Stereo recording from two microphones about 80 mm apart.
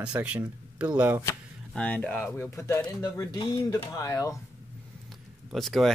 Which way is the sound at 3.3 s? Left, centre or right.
Left.